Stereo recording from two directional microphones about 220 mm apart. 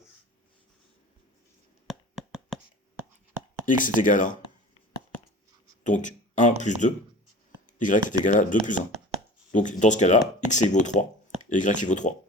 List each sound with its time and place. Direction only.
1.9 s a sound: centre (ahead or behind)
3.7 s speech: 35° left (ahead or behind)
5.8 s speech: 35° left (ahead or behind)